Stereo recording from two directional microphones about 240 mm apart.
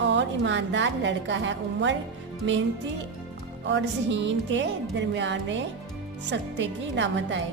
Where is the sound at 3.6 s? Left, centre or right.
Right.